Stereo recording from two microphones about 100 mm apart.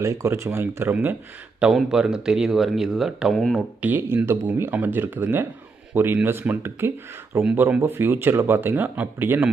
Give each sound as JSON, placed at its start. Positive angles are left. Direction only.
{"t": 0.0, "sound": "speech", "side_deg": -30}
{"t": 1.6, "sound": "speech", "side_deg": -5}
{"t": 3.8, "sound": "speech", "side_deg": -20}